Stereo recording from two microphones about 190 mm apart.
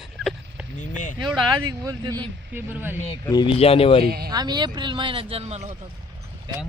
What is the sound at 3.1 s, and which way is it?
Speech, 25° left (ahead or behind).